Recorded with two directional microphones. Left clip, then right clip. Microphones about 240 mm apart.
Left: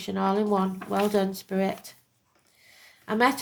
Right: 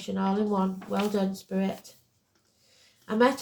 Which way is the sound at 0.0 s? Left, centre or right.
Left.